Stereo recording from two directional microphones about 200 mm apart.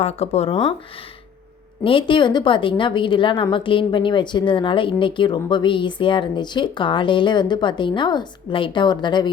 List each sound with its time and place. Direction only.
0.0 s speech: 30° left (ahead or behind)
1.8 s a woman's voice: 25° left (ahead or behind)